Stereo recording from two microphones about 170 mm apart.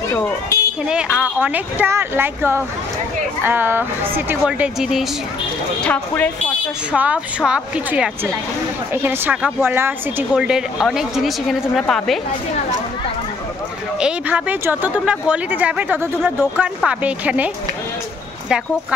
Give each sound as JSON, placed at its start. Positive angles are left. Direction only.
{"t": 0.1, "sound": "speech", "side_deg": 15}
{"t": 0.8, "sound": "a woman's voice", "side_deg": -5}
{"t": 6.9, "sound": "a woman's voice", "side_deg": -10}
{"t": 13.9, "sound": "a woman's voice", "side_deg": -5}